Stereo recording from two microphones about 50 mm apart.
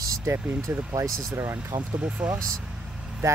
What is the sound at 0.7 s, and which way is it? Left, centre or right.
Speech, right.